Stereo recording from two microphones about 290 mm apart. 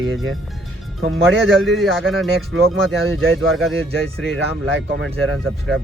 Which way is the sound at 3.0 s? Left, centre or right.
Right.